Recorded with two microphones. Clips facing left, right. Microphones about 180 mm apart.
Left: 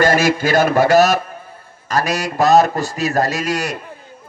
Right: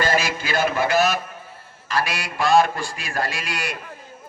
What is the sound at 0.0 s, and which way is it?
Music, 45° left (ahead or behind).